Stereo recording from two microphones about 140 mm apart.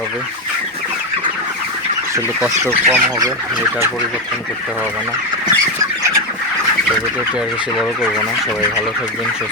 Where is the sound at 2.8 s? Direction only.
20° right (ahead or behind).